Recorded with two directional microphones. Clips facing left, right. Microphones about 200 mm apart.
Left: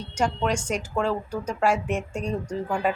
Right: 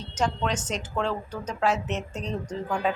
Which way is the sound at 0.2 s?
10° left (ahead or behind).